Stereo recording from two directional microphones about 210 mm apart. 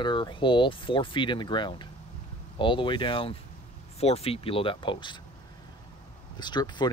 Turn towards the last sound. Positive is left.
turn(degrees=20)  # may be behind; listen again after turning